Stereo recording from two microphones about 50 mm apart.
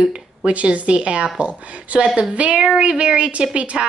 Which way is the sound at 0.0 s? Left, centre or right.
Right.